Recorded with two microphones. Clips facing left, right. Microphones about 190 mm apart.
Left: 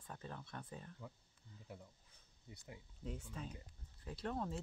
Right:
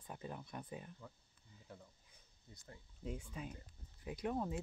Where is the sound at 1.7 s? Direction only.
5° left (ahead or behind).